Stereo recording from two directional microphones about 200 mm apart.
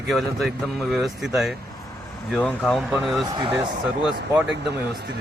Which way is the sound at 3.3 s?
20° right (ahead or behind).